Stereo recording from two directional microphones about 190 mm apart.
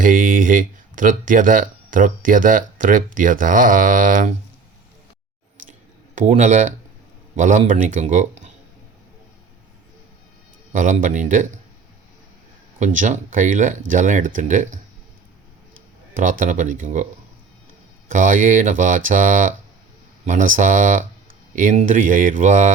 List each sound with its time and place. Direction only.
0.0 s speech: 45° right (ahead or behind)
6.1 s speech: 40° right (ahead or behind)
10.7 s speech: 40° right (ahead or behind)
12.8 s speech: 40° right (ahead or behind)
16.4 s speech: 40° right (ahead or behind)
18.1 s speech: 45° right (ahead or behind)